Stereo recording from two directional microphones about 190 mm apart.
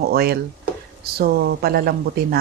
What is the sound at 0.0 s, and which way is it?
Speech, 55° right (ahead or behind).